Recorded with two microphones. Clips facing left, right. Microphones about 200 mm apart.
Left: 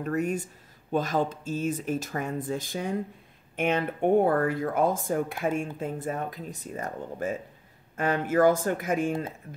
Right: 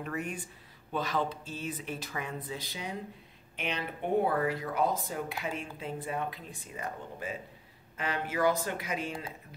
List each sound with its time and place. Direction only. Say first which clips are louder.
0.0 s speech: left 9 dB; 40° left (ahead or behind)